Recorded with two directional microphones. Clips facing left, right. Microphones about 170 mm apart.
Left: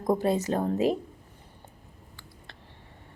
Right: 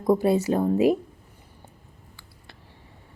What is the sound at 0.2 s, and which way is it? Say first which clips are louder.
Speech: right 4 dB; 10° right (ahead or behind).